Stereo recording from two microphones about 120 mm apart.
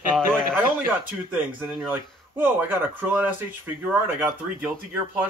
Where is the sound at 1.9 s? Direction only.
15° right (ahead or behind).